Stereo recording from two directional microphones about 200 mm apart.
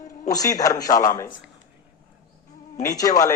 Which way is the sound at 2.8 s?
15° left (ahead or behind).